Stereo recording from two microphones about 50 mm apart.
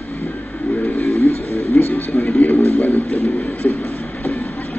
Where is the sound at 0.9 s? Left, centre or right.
Left.